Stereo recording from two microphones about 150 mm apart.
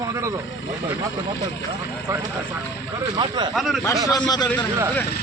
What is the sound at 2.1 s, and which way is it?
Speech, 20° right (ahead or behind).